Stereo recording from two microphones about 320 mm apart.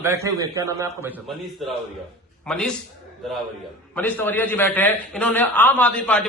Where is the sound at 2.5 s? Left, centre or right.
Centre.